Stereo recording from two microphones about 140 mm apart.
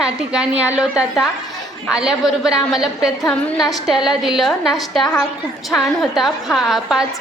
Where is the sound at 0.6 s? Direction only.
10° right (ahead or behind).